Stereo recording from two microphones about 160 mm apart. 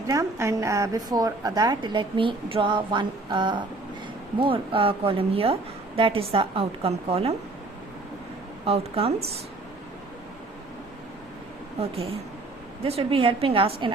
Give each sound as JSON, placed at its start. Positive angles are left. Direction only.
{"t": 0.1, "sound": "a woman's voice", "side_deg": -20}
{"t": 8.6, "sound": "a woman's voice", "side_deg": -40}
{"t": 11.8, "sound": "a woman's voice", "side_deg": -40}